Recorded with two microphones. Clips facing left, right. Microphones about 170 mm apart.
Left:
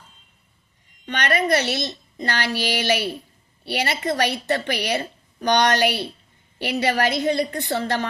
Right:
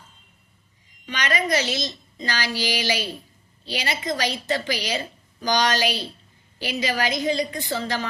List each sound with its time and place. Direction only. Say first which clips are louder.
1.0 s a woman's voice: left 4 dB; 60° left (ahead or behind)